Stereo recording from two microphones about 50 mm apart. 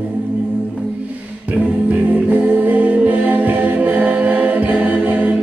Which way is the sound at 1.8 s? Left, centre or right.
Right.